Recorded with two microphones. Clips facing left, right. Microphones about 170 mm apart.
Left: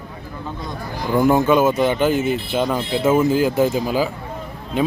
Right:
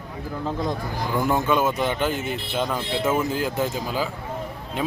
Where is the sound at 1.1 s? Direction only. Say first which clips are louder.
Left 7 dB; 10° left (ahead or behind).